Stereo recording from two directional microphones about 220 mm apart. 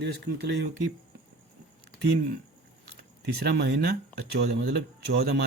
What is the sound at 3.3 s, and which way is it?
Speech, 50° right (ahead or behind).